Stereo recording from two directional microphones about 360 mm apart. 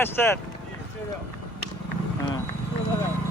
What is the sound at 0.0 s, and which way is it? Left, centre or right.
Speech, centre.